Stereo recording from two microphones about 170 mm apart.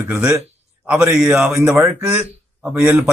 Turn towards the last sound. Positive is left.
turn(degrees=-5)  # may be behind; listen again after turning